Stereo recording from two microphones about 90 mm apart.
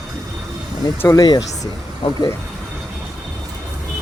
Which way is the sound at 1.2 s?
50° left (ahead or behind).